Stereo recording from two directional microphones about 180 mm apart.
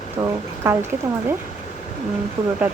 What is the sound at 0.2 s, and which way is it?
Speech, 20° right (ahead or behind).